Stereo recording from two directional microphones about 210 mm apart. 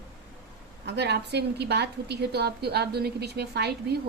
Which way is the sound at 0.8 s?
55° right (ahead or behind).